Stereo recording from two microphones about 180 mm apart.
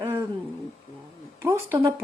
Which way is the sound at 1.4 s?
15° right (ahead or behind).